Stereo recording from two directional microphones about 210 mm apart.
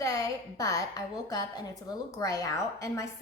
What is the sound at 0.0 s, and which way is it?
A woman's voice, 15° left (ahead or behind).